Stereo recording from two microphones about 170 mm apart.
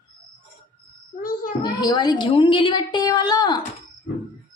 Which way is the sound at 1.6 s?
25° left (ahead or behind).